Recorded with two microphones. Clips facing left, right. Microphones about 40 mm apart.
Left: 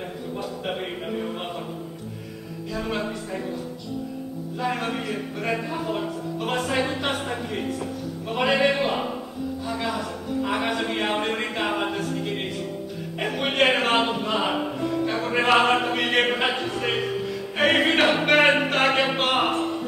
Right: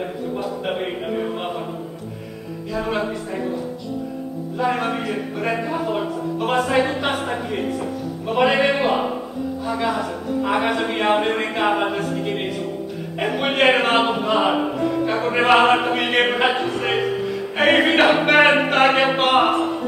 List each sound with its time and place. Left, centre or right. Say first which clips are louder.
0.7 s music: right 4 dB; centre
2.7 s speech: right 5 dB; centre
4.6 s speech: right 5 dB; centre
19.5 s a sound: right 5 dB; right